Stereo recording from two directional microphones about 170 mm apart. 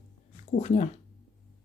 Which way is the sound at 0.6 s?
40° left (ahead or behind).